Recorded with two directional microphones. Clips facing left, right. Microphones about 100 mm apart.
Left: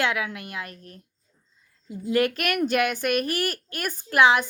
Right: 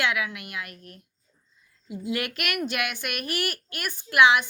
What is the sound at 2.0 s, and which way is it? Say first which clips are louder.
A woman's voice: left 7 dB; 35° left (ahead or behind).